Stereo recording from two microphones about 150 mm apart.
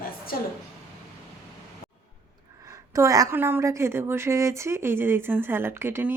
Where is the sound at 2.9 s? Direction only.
20° right (ahead or behind).